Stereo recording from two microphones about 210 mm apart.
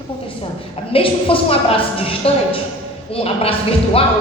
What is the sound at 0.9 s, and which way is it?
Speech, 25° left (ahead or behind).